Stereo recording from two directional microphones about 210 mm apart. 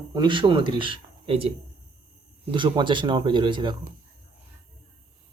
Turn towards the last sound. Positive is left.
turn(degrees=-20)  # may be behind; listen again after turning